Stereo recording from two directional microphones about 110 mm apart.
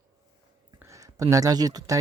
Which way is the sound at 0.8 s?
30° right (ahead or behind).